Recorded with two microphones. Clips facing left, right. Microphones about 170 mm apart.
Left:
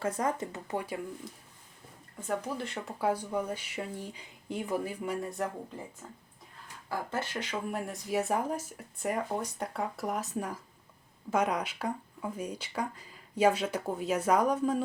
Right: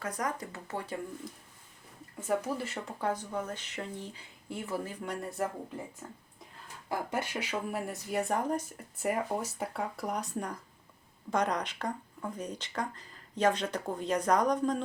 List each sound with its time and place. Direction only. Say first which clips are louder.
0.0 s speech: left 4 dB; 25° left (ahead or behind)
2.2 s speech: right 2 dB; 5° right (ahead or behind)
6.8 s speech: right 1 dB; 15° right (ahead or behind); by 14.8 s 5° left (ahead or behind)